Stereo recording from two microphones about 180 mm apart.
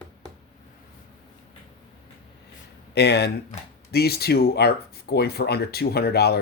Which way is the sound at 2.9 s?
65° left (ahead or behind).